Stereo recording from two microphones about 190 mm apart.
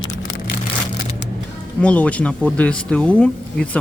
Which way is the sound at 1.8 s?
5° left (ahead or behind).